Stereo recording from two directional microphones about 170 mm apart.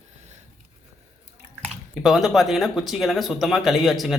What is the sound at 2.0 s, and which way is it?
Speech, centre (ahead or behind).